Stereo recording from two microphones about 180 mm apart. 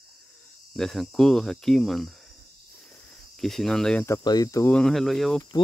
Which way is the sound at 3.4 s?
Centre (ahead or behind).